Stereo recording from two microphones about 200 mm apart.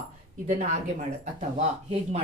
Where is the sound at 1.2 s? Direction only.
40° right (ahead or behind).